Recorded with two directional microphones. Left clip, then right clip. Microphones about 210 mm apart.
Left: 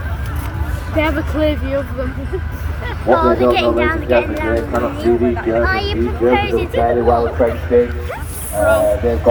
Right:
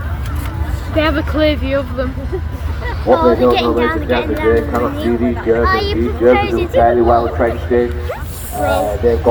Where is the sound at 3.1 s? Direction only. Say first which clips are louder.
Right 2 dB; 50° right (ahead or behind).